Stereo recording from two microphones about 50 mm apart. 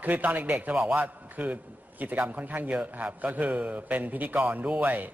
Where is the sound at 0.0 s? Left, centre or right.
Right.